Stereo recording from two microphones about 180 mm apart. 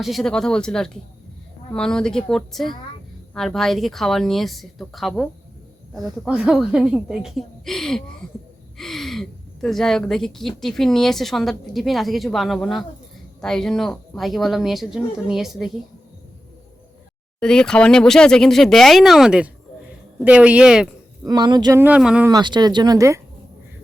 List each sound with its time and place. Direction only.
0.0 s speech: centre (ahead or behind)
17.4 s speech: 5° left (ahead or behind)
21.2 s speech: 25° right (ahead or behind)
21.8 s speech: 5° right (ahead or behind)
22.3 s speech: 25° right (ahead or behind)